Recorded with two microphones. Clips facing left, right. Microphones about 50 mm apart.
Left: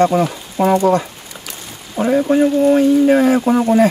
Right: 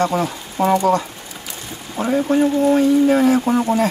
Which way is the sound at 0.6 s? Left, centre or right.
Left.